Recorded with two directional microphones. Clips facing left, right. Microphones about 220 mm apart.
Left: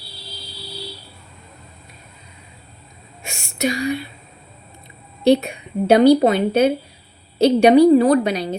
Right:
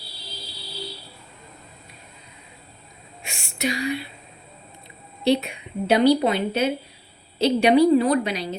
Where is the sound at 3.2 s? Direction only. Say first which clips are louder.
Left 5 dB; 45° left (ahead or behind).